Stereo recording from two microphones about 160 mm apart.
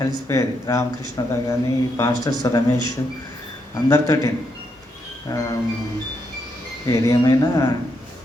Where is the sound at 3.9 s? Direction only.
20° left (ahead or behind).